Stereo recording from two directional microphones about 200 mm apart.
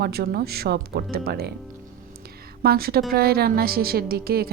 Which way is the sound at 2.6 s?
50° right (ahead or behind).